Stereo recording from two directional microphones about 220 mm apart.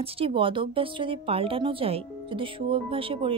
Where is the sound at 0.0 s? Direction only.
25° right (ahead or behind).